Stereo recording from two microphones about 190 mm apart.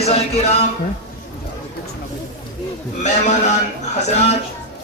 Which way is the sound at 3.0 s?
40° left (ahead or behind).